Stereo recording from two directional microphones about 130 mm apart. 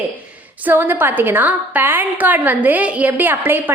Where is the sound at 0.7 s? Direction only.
15° right (ahead or behind).